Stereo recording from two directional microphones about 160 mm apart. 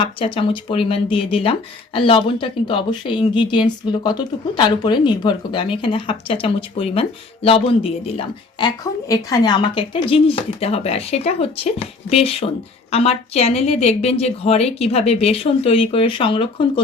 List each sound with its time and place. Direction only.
0.0 s speech: 35° left (ahead or behind)